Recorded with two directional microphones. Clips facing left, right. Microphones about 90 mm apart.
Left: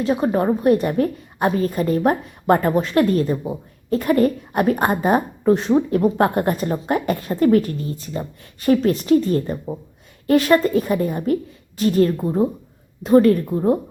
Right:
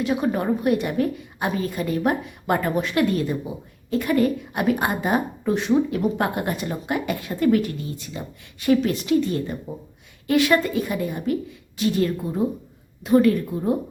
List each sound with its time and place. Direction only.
0.0 s a woman's voice: 35° left (ahead or behind)